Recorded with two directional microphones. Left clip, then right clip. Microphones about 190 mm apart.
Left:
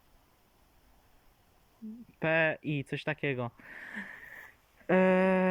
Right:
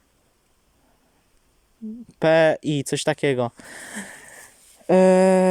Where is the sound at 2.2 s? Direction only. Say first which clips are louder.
Right 12 dB; 35° right (ahead or behind).